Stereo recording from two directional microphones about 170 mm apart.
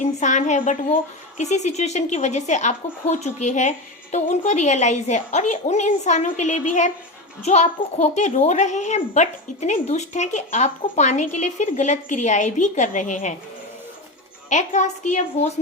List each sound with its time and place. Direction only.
0.0 s a child's voice: 45° left (ahead or behind)
14.5 s a child's voice: 45° left (ahead or behind)